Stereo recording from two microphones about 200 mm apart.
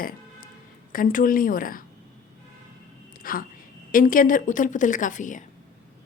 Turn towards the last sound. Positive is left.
turn(degrees=40)  # may be behind; listen again after turning